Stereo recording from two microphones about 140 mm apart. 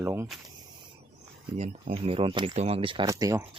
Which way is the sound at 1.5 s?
50° right (ahead or behind).